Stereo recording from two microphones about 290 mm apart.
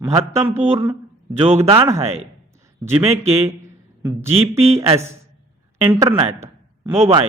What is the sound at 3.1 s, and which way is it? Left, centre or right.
Speech, right.